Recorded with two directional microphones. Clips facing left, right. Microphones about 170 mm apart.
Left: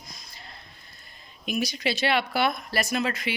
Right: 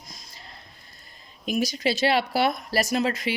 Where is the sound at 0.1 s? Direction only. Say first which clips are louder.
Even; 40° right (ahead or behind).